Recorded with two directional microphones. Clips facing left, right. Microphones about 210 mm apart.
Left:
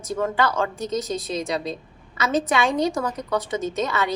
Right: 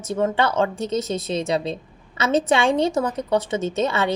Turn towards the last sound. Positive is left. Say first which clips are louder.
# right 3 dB
turn(degrees=-25)  # may be behind; listen again after turning